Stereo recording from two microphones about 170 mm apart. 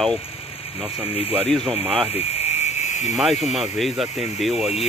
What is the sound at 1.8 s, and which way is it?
Speech, 5° right (ahead or behind).